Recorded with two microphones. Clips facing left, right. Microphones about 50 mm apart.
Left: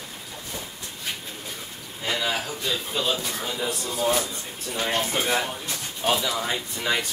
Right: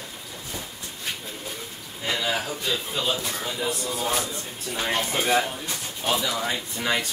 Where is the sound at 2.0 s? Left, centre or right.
Centre.